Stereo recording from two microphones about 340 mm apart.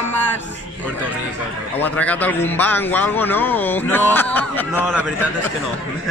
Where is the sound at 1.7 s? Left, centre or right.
Centre.